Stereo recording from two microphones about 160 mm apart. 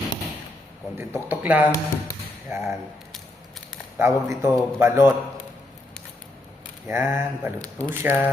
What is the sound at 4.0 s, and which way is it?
A man's voice, 15° right (ahead or behind).